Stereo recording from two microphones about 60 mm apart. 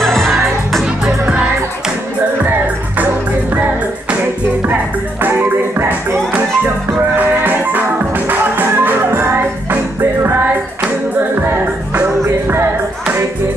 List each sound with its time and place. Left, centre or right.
0.0 s music: centre
2.4 s music: right
5.8 s music: right
11.4 s music: right